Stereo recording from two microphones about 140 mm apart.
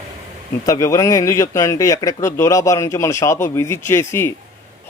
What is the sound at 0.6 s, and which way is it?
Speech, 25° left (ahead or behind).